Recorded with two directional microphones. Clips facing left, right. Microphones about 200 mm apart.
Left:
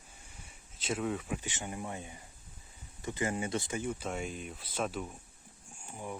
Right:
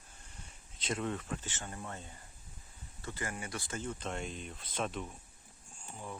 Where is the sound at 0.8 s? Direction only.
5° left (ahead or behind).